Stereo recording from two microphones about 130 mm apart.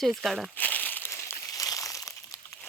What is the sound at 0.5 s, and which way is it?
Crumpling, 15° left (ahead or behind).